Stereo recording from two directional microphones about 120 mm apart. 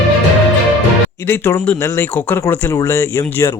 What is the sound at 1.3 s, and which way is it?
Speech, 20° left (ahead or behind).